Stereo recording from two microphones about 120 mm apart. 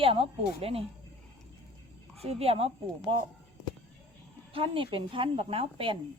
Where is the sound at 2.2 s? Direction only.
55° right (ahead or behind).